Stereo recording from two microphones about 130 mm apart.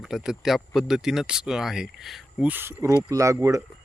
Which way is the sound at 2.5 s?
15° right (ahead or behind).